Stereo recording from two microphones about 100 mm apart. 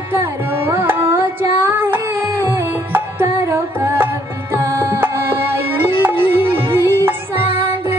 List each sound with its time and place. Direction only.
0.1 s carnatic music: 25° right (ahead or behind)
4.6 s music: 25° right (ahead or behind)